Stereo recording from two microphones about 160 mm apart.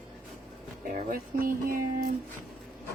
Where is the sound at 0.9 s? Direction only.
65° right (ahead or behind).